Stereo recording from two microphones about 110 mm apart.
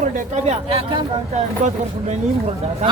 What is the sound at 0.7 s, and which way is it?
Speech, 65° right (ahead or behind).